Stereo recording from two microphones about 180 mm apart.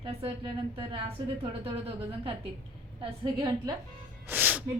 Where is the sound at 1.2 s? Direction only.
25° right (ahead or behind).